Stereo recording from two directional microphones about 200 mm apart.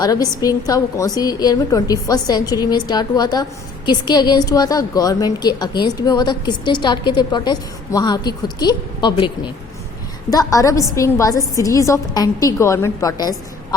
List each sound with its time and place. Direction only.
0.0 s a woman's voice: 20° left (ahead or behind)